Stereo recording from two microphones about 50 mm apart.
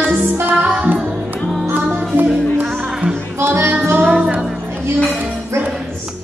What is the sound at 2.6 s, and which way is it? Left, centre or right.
Music, centre.